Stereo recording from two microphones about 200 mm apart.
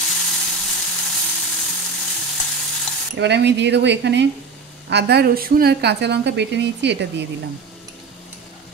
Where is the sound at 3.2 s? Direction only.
60° right (ahead or behind).